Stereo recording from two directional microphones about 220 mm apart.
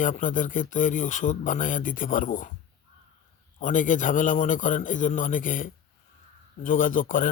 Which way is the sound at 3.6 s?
35° left (ahead or behind).